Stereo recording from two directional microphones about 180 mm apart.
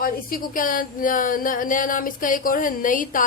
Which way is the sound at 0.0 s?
50° left (ahead or behind).